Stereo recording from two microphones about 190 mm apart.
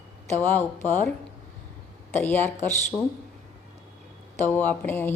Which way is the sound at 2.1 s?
10° left (ahead or behind).